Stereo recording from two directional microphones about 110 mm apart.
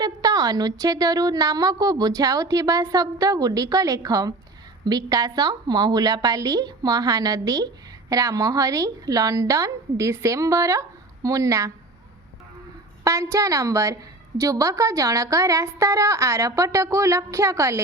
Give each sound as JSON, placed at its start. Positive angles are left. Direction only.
{"t": 0.0, "sound": "a woman's voice", "side_deg": -35}
{"t": 13.1, "sound": "a woman's voice", "side_deg": -25}